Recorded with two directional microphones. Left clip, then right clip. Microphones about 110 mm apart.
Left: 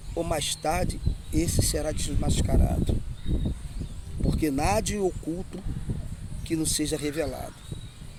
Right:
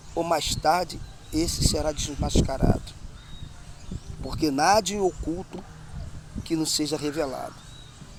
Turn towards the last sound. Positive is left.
turn(degrees=15)  # may be behind; listen again after turning